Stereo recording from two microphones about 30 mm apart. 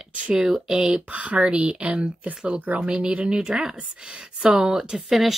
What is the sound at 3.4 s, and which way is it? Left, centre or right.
Speech, right.